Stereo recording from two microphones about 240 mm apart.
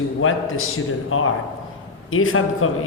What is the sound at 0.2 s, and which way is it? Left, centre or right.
A man's voice, left.